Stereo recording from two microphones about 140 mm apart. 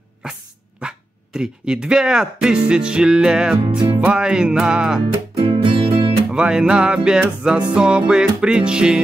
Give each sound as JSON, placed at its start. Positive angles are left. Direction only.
{"t": 0.2, "sound": "speech", "side_deg": -5}
{"t": 4.0, "sound": "music", "side_deg": -5}
{"t": 5.4, "sound": "music", "side_deg": -35}
{"t": 6.3, "sound": "music", "side_deg": -5}